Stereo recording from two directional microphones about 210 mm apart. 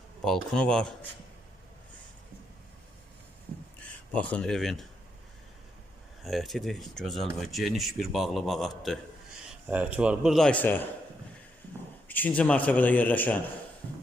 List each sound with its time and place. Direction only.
0.3 s speech: 5° left (ahead or behind)
4.1 s speech: 5° left (ahead or behind)
6.2 s speech: centre (ahead or behind)
12.0 s a man's voice: 10° left (ahead or behind)